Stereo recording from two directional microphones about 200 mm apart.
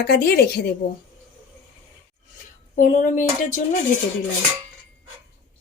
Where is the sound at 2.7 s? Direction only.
40° left (ahead or behind).